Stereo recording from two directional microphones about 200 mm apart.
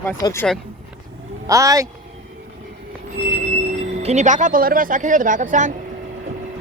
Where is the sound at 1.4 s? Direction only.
15° right (ahead or behind).